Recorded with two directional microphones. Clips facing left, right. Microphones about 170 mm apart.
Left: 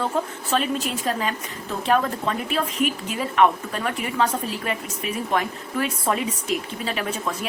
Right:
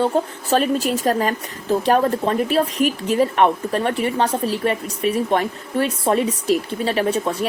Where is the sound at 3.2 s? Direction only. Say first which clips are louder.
Right 2 dB; 35° right (ahead or behind).